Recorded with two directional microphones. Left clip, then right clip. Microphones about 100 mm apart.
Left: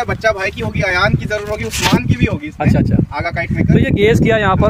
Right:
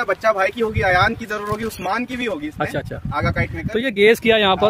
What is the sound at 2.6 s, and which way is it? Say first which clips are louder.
Speech: left 6 dB; 15° left (ahead or behind).